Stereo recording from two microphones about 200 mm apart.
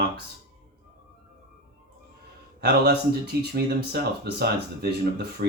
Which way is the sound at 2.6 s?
55° right (ahead or behind).